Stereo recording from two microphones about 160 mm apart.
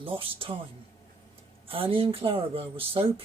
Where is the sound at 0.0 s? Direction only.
35° right (ahead or behind).